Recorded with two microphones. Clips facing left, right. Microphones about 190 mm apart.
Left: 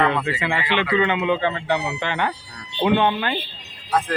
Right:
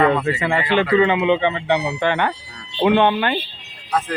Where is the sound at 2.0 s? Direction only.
60° right (ahead or behind).